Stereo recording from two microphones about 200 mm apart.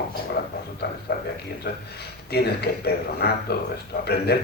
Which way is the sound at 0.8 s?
55° left (ahead or behind).